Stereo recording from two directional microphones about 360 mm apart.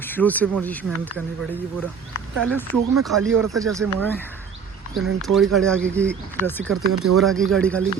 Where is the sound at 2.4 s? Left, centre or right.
Centre.